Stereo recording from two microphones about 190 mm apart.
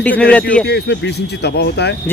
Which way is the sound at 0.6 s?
60° left (ahead or behind).